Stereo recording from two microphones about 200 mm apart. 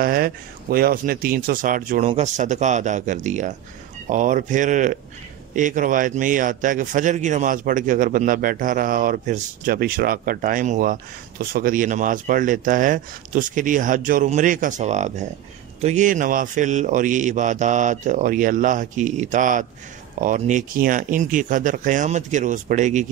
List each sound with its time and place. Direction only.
0.0 s speech: 50° right (ahead or behind)